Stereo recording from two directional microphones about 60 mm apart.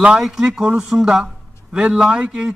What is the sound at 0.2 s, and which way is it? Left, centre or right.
Speech, centre.